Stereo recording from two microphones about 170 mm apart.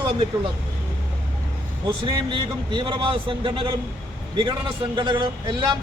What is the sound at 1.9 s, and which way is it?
A man's voice, 30° right (ahead or behind).